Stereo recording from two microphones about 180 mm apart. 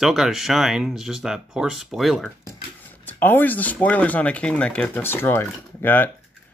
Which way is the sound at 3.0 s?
10° left (ahead or behind).